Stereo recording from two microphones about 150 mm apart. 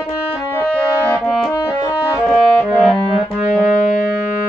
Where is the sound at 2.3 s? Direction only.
Centre (ahead or behind).